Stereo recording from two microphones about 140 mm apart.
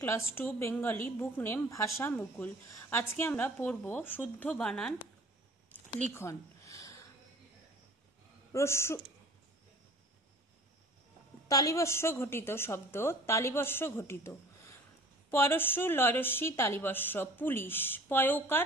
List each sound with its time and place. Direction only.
0.0 s a woman's voice: 15° left (ahead or behind)
6.1 s a sound: 20° left (ahead or behind)
8.5 s speech: 20° left (ahead or behind)
11.4 s a woman's voice: 25° left (ahead or behind)